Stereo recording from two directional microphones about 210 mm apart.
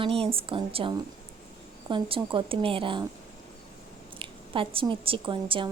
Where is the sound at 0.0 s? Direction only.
25° right (ahead or behind).